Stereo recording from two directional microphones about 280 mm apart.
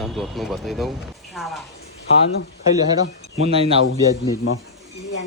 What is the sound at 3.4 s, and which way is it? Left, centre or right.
Speech, right.